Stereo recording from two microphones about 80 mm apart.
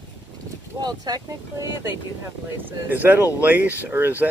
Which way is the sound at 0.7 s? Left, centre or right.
Right.